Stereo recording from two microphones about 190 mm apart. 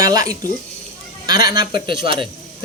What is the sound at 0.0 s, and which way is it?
A man's voice, 20° right (ahead or behind).